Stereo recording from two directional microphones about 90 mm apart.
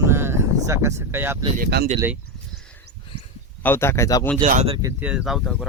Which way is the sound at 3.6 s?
25° left (ahead or behind).